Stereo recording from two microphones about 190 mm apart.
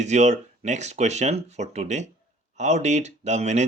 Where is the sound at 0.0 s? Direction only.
35° right (ahead or behind).